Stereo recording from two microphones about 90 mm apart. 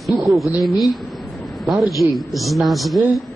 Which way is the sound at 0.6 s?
Centre (ahead or behind).